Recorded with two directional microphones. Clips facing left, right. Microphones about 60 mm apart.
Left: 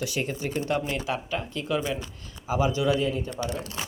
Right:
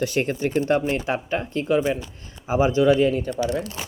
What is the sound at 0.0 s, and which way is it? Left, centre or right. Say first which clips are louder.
Speech: right 7 dB; right.